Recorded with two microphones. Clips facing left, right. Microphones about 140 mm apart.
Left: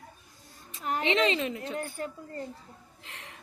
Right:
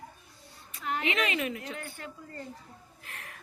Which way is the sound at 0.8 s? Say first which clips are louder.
Left 2 dB; 40° left (ahead or behind).